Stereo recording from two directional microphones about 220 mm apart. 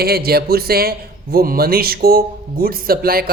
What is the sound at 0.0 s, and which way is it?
A man's voice, 45° right (ahead or behind).